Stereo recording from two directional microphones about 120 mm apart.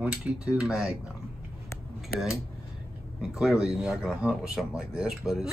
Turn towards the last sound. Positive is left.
turn(degrees=-5)  # may be behind; listen again after turning